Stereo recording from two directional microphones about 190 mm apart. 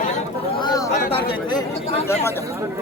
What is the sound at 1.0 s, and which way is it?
Speech, 55° left (ahead or behind).